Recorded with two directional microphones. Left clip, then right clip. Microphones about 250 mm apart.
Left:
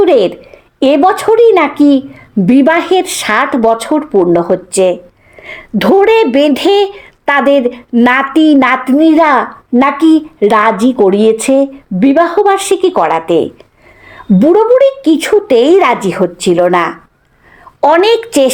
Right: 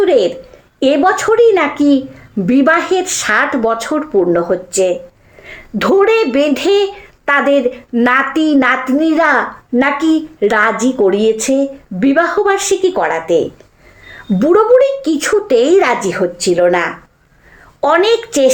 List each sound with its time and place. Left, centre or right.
0.0 s a woman's voice: left